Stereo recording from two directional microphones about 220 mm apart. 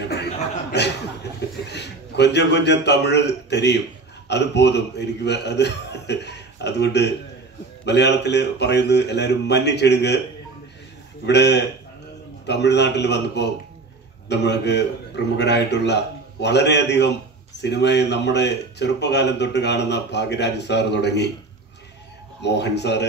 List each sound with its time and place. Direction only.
0.1 s chuckle: 50° left (ahead or behind)
1.7 s a man's voice: 50° left (ahead or behind)
11.2 s speech: 50° left (ahead or behind)
22.4 s speech: 50° left (ahead or behind)